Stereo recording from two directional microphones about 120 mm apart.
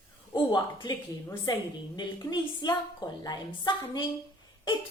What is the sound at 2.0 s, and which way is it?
Speech, 35° left (ahead or behind).